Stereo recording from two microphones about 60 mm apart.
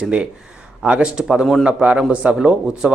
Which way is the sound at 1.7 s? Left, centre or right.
Centre.